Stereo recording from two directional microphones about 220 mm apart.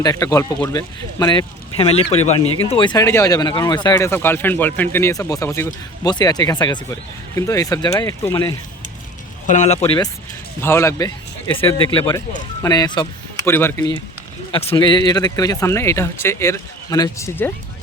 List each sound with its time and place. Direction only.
0.0 s speech: 15° left (ahead or behind)
9.5 s speech: 30° left (ahead or behind)
10.6 s speech: 10° left (ahead or behind)
14.5 s speech: 25° left (ahead or behind)